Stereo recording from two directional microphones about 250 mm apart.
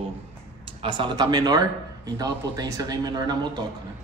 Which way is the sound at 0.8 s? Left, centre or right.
Centre.